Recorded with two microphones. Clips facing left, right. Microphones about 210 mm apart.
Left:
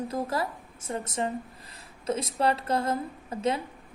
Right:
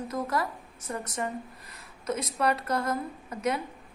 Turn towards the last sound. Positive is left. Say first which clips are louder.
# left 1 dB
turn(degrees=25)  # may be behind; listen again after turning